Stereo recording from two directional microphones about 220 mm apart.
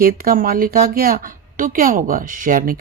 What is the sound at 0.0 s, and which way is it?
Speech, 40° right (ahead or behind).